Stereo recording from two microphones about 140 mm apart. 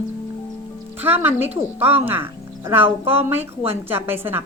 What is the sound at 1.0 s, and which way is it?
A woman's voice, 15° right (ahead or behind).